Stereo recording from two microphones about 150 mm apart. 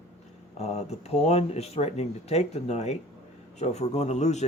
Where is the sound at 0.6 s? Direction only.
45° left (ahead or behind).